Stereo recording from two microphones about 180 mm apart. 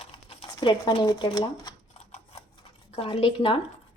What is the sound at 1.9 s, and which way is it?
Typewriter, 40° left (ahead or behind).